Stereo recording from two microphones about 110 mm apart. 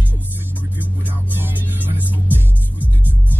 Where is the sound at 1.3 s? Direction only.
20° right (ahead or behind).